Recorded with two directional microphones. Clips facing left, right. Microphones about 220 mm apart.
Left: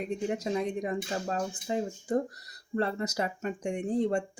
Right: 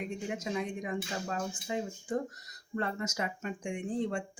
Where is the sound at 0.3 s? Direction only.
35° left (ahead or behind).